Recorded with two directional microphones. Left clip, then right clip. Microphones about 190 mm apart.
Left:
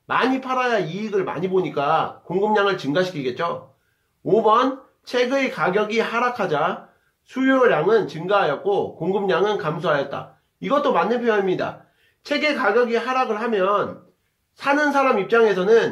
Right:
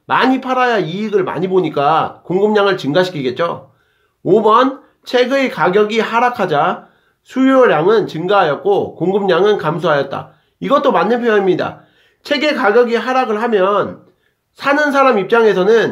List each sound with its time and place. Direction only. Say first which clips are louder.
0.0 s speech: right 7 dB; 45° right (ahead or behind)